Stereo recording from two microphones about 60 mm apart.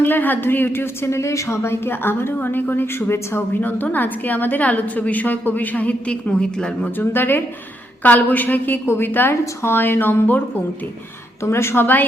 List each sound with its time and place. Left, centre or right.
0.0 s a woman's voice: left; by 6.9 s centre
7.0 s a woman's voice: left
11.4 s a woman's voice: left